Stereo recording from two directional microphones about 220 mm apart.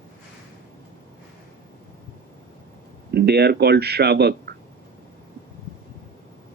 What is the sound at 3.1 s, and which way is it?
Speech, 45° right (ahead or behind).